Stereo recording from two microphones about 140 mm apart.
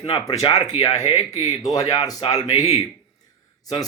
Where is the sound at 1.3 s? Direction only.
25° left (ahead or behind).